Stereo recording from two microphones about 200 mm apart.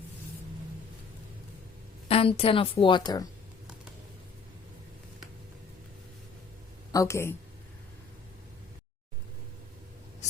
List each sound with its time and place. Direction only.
2.0 s speech: 30° left (ahead or behind)
6.9 s a woman's voice: 15° left (ahead or behind)